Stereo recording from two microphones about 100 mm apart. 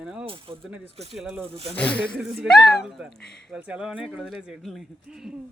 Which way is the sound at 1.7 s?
10° left (ahead or behind).